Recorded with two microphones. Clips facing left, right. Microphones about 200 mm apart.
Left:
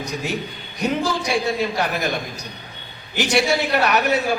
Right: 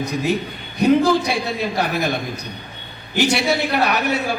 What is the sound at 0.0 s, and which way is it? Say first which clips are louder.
A man's voice: right 5 dB; 55° right (ahead or behind).